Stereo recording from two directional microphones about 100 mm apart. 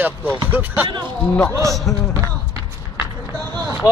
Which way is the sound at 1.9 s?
5° left (ahead or behind).